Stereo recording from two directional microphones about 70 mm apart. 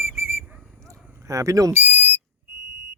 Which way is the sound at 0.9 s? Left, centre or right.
Right.